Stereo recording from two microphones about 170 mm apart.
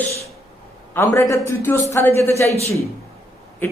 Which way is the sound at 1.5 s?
15° left (ahead or behind).